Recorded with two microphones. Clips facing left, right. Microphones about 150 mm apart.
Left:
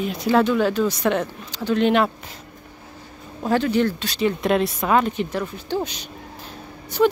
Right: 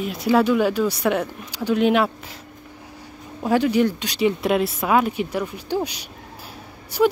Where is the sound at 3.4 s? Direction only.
10° right (ahead or behind).